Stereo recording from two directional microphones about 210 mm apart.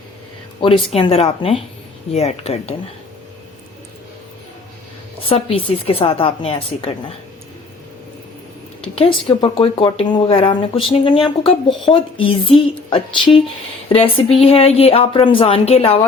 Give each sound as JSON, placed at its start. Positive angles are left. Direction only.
{"t": 0.9, "sound": "speech", "side_deg": 30}
{"t": 5.2, "sound": "speech", "side_deg": 25}
{"t": 8.8, "sound": "speech", "side_deg": 25}